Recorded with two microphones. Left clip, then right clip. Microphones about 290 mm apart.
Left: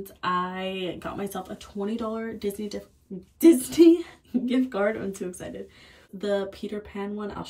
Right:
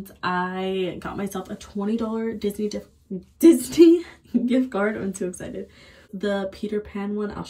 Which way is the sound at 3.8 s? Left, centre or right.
Centre.